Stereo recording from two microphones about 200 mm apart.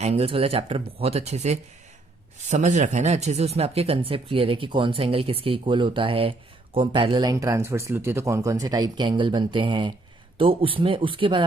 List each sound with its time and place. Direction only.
0.0 s speech: 30° right (ahead or behind)